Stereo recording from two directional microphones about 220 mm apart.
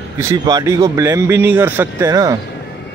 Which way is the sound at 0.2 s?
15° right (ahead or behind).